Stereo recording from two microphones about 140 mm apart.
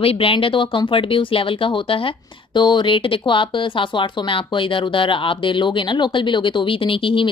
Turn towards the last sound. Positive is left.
turn(degrees=40)  # may be behind; listen again after turning